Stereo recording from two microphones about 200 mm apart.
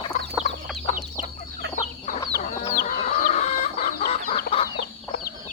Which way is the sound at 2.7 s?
40° left (ahead or behind).